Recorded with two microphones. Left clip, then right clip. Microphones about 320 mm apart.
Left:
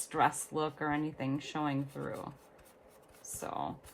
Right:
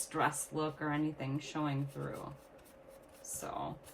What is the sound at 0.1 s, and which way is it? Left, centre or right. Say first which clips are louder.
Speech: left 4 dB; left.